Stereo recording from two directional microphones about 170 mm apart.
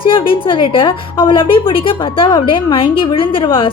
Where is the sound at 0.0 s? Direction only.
30° left (ahead or behind).